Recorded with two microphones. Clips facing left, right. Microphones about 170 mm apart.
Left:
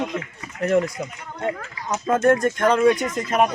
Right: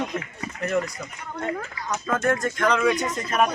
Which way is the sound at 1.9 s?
25° left (ahead or behind).